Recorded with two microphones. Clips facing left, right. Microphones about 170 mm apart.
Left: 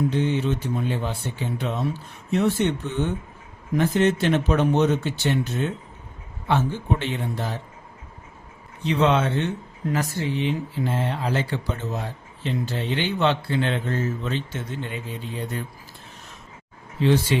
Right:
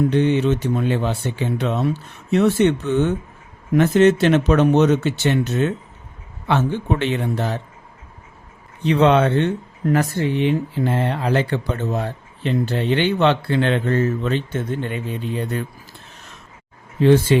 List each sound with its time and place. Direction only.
0.1 s speech: 70° right (ahead or behind)
8.8 s speech: 60° right (ahead or behind)
17.0 s speech: 50° right (ahead or behind)